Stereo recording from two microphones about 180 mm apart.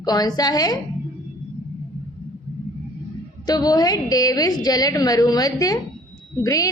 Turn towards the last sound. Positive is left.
turn(degrees=20)  # may be behind; listen again after turning